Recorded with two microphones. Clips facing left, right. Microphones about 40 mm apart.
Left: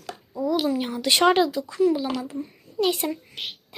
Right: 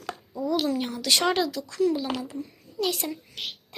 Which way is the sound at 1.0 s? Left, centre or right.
Left.